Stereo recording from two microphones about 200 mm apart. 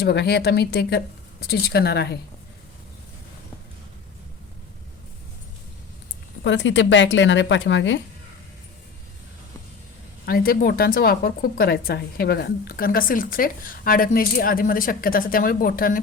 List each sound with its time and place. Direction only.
0.0 s speech: 55° left (ahead or behind)
6.4 s speech: 65° left (ahead or behind)
10.2 s speech: 50° left (ahead or behind)